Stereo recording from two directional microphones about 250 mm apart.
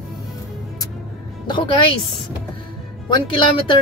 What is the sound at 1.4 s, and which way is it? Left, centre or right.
Music, centre.